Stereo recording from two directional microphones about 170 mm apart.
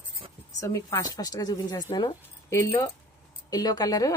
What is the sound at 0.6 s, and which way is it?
Speech, 20° left (ahead or behind).